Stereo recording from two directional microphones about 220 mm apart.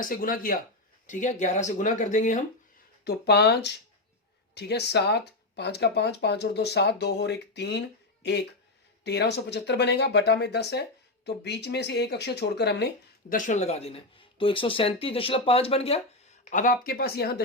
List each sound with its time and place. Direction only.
0.0 s speech: 40° left (ahead or behind)
3.0 s speech: 50° left (ahead or behind)
13.3 s speech: 35° left (ahead or behind)